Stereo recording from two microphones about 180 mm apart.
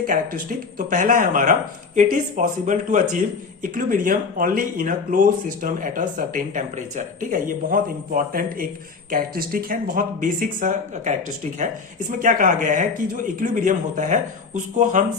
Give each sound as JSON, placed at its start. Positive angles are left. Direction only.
{"t": 0.0, "sound": "speech", "side_deg": -50}